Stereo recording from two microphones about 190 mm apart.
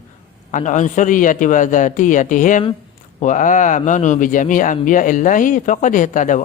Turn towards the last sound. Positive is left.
turn(degrees=40)  # may be behind; listen again after turning